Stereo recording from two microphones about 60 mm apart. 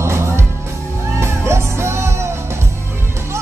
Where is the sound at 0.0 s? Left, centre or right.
Right.